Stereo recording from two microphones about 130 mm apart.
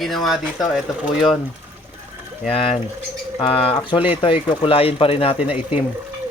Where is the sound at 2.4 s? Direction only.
50° left (ahead or behind).